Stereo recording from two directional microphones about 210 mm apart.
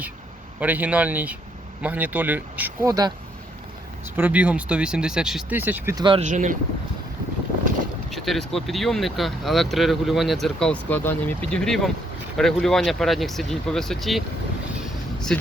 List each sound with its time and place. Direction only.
0.6 s speech: 10° right (ahead or behind)
4.2 s speech: 5° right (ahead or behind)
6.1 s speech: 35° right (ahead or behind)
8.1 s speech: centre (ahead or behind)
15.3 s speech: 5° left (ahead or behind)